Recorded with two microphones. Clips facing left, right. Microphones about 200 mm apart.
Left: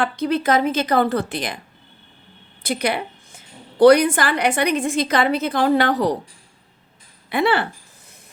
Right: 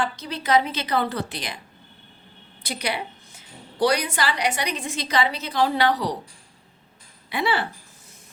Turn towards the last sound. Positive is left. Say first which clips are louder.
# left 6 dB
turn(degrees=55)  # may be behind; listen again after turning